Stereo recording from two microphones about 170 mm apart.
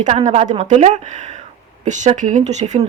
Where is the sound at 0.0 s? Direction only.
45° right (ahead or behind).